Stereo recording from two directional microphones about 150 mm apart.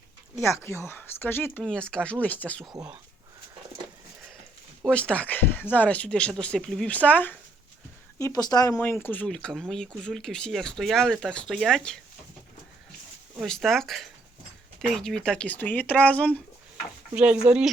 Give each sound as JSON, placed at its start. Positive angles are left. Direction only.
{"t": 0.4, "sound": "speech", "side_deg": 15}
{"t": 4.9, "sound": "speech", "side_deg": 10}
{"t": 8.2, "sound": "speech", "side_deg": 25}
{"t": 8.8, "sound": "speech", "side_deg": 10}
{"t": 13.4, "sound": "speech", "side_deg": 0}
{"t": 17.5, "sound": "speech", "side_deg": -10}